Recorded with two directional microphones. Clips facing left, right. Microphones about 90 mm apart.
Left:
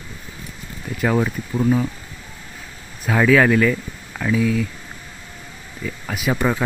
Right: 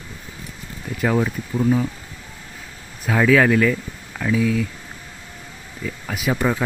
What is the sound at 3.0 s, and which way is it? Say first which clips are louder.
Speech: left 1 dB; 25° left (ahead or behind).